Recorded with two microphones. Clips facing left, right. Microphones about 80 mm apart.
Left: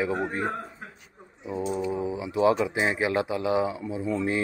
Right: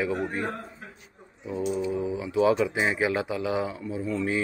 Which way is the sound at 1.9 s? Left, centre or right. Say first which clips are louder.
Even; centre.